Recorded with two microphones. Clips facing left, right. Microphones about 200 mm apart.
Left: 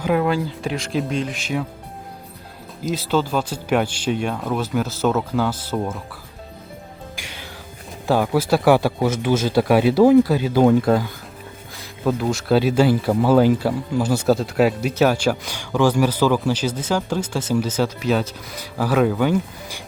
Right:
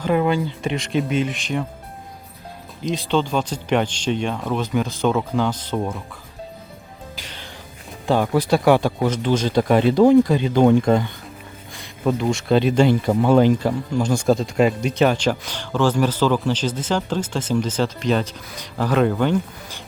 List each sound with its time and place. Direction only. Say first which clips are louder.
0.0 s speech: even; centre (ahead or behind)
2.8 s speech: even; 5° left (ahead or behind)
7.2 s music: left 1 dB; 10° left (ahead or behind)
8.0 s speech: even; 5° left (ahead or behind)